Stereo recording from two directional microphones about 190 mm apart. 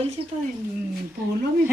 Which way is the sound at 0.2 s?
30° right (ahead or behind).